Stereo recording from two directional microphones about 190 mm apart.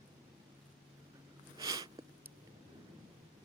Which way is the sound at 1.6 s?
20° right (ahead or behind).